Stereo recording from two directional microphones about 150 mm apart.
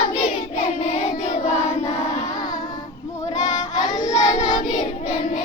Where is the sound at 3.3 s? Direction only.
50° left (ahead or behind).